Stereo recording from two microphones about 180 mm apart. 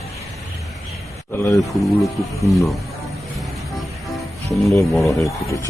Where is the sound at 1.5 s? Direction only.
15° left (ahead or behind).